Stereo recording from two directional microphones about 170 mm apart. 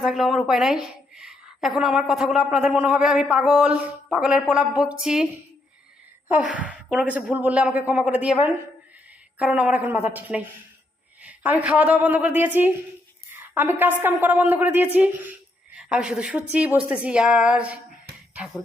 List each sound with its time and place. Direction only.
0.0 s a woman's voice: centre (ahead or behind)